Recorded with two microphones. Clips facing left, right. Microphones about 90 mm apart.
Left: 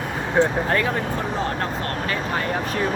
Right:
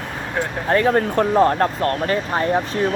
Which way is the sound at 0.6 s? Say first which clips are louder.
Right 5 dB; 30° right (ahead or behind).